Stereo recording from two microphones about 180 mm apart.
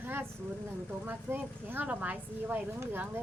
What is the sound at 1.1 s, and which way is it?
Speech, 10° right (ahead or behind).